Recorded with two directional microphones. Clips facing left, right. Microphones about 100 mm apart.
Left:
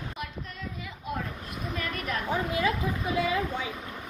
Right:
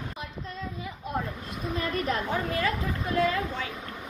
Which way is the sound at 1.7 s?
30° right (ahead or behind).